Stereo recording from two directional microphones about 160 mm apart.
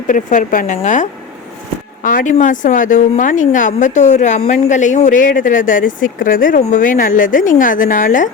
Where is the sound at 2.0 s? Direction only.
55° left (ahead or behind).